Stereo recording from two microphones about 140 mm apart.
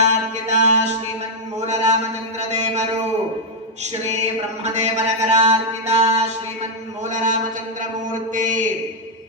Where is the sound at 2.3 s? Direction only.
55° right (ahead or behind).